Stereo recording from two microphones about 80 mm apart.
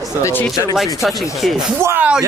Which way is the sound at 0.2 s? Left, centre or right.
Left.